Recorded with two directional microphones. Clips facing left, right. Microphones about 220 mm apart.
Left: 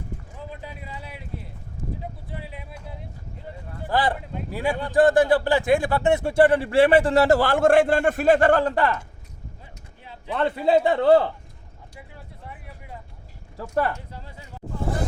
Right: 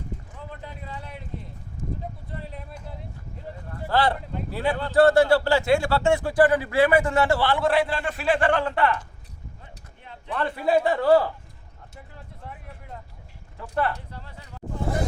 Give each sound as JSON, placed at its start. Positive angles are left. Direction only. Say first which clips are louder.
{"t": 0.6, "sound": "speech", "louder": "even", "side_deg": 10}
{"t": 2.3, "sound": "a sound", "louder": "even", "side_deg": 5}
{"t": 3.8, "sound": "speech", "louder": "right 1 dB", "side_deg": 15}
{"t": 4.1, "sound": "speech", "louder": "even", "side_deg": 5}
{"t": 10.3, "sound": "speech", "louder": "left 3 dB", "side_deg": 25}
{"t": 12.1, "sound": "speech", "louder": "right 2 dB", "side_deg": 5}